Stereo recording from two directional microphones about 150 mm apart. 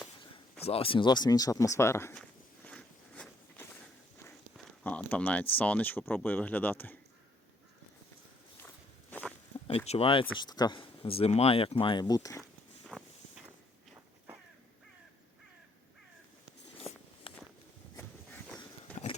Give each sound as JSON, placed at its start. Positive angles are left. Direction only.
{"t": 0.6, "sound": "speech", "side_deg": 40}
{"t": 2.6, "sound": "biting", "side_deg": 5}
{"t": 4.5, "sound": "speech", "side_deg": 10}
{"t": 8.6, "sound": "walk", "side_deg": 10}
{"t": 9.6, "sound": "speech", "side_deg": 40}
{"t": 10.3, "sound": "speech", "side_deg": 25}
{"t": 12.4, "sound": "walk", "side_deg": 0}
{"t": 17.3, "sound": "a sound", "side_deg": 35}
{"t": 17.9, "sound": "a sound", "side_deg": 15}